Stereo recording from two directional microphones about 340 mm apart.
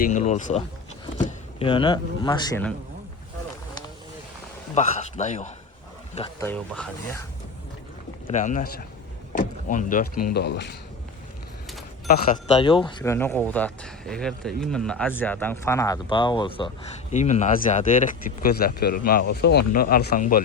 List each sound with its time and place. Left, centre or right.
0.0 s speech: left
4.7 s speech: left
6.5 s speech: centre
8.3 s speech: left
12.0 s speech: left
12.6 s speech: centre